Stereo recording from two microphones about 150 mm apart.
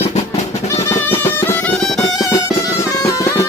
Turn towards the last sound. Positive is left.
turn(degrees=20)  # may be behind; listen again after turning